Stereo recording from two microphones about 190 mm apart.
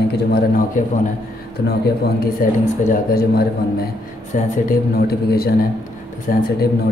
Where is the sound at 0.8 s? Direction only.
45° left (ahead or behind).